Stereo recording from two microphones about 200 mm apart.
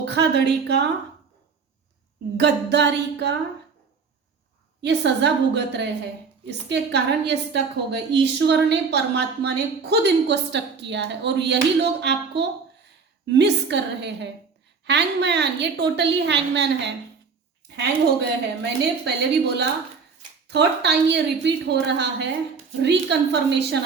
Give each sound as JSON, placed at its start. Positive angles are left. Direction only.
{"t": 0.0, "sound": "a woman's voice", "side_deg": -60}
{"t": 2.4, "sound": "a woman's voice", "side_deg": -60}
{"t": 4.8, "sound": "a woman's voice", "side_deg": -60}
{"t": 20.5, "sound": "a woman's voice", "side_deg": -55}